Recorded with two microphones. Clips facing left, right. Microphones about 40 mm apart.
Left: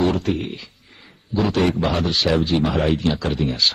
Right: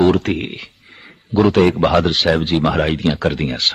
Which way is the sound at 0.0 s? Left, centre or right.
Right.